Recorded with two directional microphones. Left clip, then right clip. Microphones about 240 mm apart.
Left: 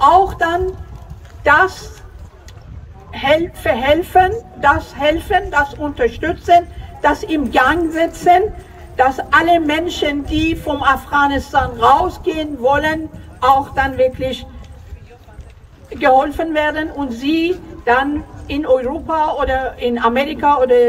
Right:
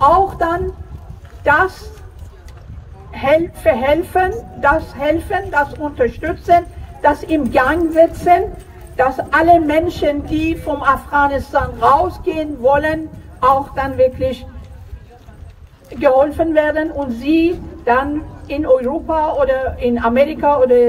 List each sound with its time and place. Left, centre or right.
0.0 s a sound: left
3.1 s a woman's voice: left
16.0 s a woman's voice: left